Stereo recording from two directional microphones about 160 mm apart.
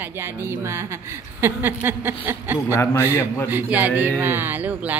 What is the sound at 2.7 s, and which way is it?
Speech, 15° left (ahead or behind).